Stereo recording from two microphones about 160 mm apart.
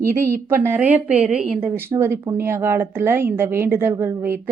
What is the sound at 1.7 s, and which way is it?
A woman's voice, 15° right (ahead or behind).